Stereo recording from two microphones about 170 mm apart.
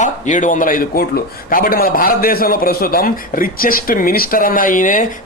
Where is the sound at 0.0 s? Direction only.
45° left (ahead or behind).